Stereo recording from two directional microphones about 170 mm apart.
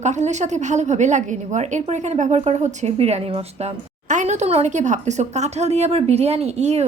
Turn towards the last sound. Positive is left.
turn(degrees=-40)  # may be behind; listen again after turning